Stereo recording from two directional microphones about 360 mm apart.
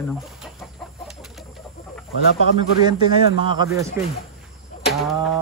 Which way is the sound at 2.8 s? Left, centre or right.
Centre.